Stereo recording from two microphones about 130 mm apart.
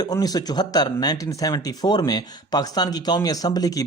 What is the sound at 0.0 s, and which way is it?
Speech, 30° left (ahead or behind).